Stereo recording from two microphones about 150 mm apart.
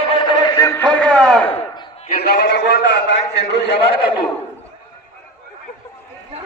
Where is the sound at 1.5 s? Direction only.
40° left (ahead or behind).